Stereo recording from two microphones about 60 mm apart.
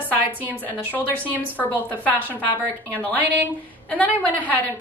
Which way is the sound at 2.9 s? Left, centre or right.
Left.